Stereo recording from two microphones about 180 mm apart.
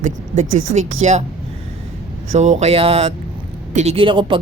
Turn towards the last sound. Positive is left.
turn(degrees=-25)  # may be behind; listen again after turning